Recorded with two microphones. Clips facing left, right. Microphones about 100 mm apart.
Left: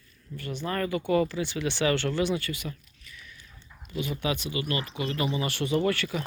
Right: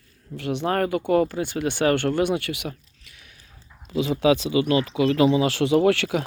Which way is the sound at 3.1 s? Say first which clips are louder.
Left 3 dB; 80° right.